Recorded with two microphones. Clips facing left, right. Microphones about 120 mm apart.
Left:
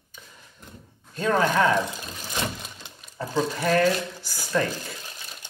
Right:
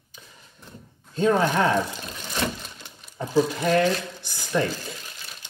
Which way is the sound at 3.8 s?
20° right (ahead or behind).